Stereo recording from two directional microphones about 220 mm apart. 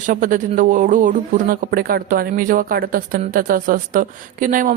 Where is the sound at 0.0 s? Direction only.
35° right (ahead or behind).